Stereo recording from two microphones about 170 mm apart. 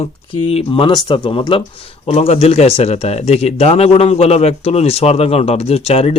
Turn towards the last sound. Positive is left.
turn(degrees=35)  # may be behind; listen again after turning